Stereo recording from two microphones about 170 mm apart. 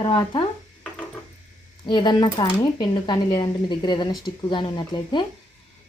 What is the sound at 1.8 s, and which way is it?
A woman's voice, 25° left (ahead or behind).